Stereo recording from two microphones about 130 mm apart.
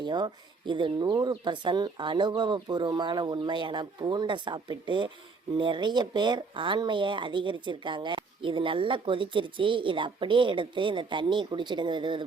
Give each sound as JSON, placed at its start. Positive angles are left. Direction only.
{"t": 0.0, "sound": "speech", "side_deg": -35}